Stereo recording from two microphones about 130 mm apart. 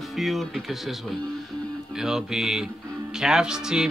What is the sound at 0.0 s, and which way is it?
Speech, centre (ahead or behind).